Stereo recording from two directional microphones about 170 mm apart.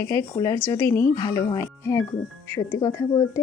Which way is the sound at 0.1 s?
20° left (ahead or behind).